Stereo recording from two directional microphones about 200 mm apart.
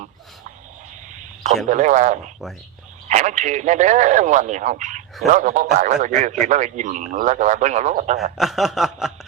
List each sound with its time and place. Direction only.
1.1 s radio: 35° right (ahead or behind)
1.6 s speech: 35° right (ahead or behind)
8.4 s snicker: centre (ahead or behind)